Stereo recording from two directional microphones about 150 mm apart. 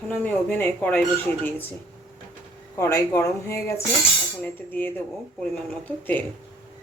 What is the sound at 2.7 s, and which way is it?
Speech, 20° left (ahead or behind).